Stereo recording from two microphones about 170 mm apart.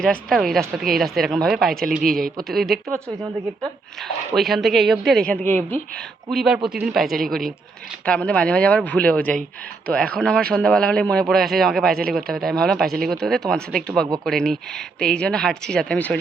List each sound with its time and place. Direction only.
0.0 s speech: centre (ahead or behind)
2.0 s speech: 55° right (ahead or behind)
2.4 s speech: centre (ahead or behind)
4.4 s speech: centre (ahead or behind)
6.3 s speech: 5° right (ahead or behind)